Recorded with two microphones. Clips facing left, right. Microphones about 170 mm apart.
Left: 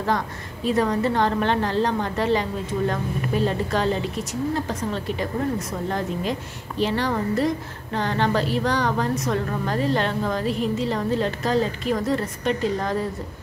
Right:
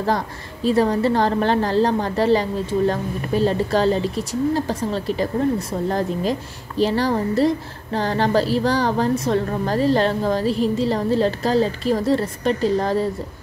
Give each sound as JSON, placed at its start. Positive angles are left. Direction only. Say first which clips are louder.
{"t": 0.7, "sound": "a woman's voice", "louder": "right 4 dB", "side_deg": -30}